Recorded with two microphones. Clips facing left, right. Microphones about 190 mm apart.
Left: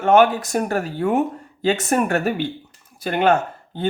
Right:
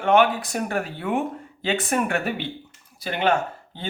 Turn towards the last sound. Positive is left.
turn(degrees=50)  # may be behind; listen again after turning